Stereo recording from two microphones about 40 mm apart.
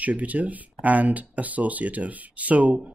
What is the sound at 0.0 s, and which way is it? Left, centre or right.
Speech, right.